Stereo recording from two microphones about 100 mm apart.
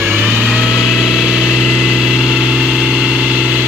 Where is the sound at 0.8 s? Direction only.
Centre (ahead or behind).